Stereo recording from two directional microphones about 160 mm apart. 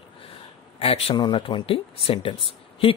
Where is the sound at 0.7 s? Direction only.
35° left (ahead or behind).